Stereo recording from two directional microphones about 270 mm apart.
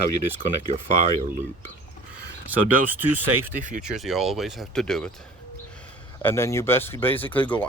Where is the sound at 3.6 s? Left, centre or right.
Right.